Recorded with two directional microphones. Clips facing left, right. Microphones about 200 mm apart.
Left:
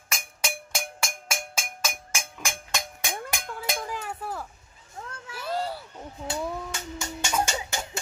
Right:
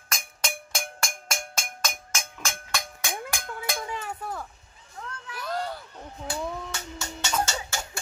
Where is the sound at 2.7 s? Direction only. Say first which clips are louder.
Even; 20° left (ahead or behind).